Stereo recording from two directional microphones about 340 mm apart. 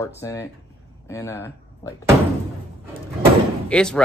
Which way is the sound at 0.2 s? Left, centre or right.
Centre.